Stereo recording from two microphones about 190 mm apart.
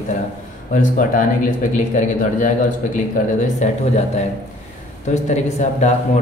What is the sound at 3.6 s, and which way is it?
Speech, 40° left (ahead or behind).